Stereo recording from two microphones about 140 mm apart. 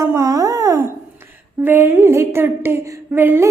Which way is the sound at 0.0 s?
25° right (ahead or behind).